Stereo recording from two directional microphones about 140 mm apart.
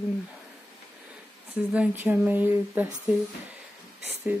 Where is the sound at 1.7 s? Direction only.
10° right (ahead or behind).